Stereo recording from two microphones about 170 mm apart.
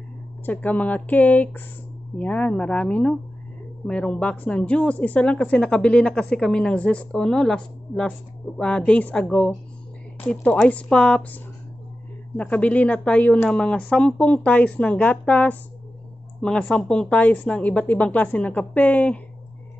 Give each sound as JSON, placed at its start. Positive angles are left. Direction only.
{"t": 0.5, "sound": "speech", "side_deg": 10}